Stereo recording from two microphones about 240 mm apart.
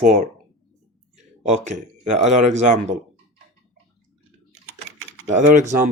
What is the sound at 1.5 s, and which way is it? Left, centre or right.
Speech, right.